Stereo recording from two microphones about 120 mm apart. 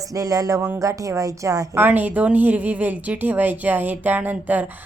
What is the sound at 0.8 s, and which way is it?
A woman's voice, 25° right (ahead or behind).